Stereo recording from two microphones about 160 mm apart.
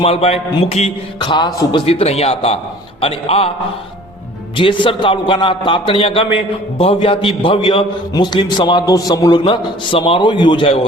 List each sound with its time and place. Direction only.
0.0 s a man's voice: 40° left (ahead or behind)
1.2 s a man's voice: 30° left (ahead or behind)
1.8 s a man's voice: 40° left (ahead or behind)
4.5 s a man's voice: 30° left (ahead or behind)